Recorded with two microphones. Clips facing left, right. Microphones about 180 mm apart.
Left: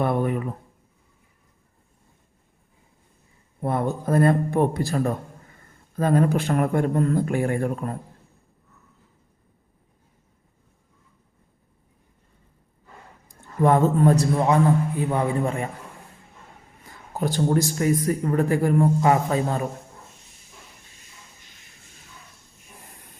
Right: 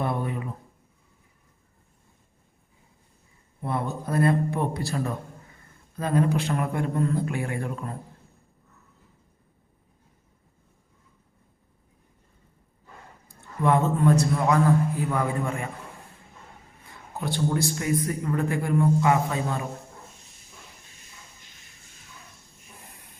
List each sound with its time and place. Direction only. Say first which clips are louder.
0.0 s a sound: left 6 dB; 55° left (ahead or behind)
3.6 s a man's voice: left 5 dB; 50° left (ahead or behind)
13.6 s a man's voice: left 4 dB; 40° left (ahead or behind)
17.2 s a man's voice: left 4 dB; 45° left (ahead or behind)